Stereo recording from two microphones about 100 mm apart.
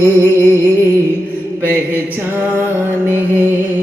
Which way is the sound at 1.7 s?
15° right (ahead or behind).